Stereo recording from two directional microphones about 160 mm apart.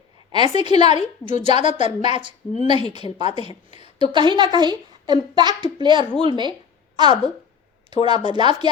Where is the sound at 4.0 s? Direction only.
30° right (ahead or behind).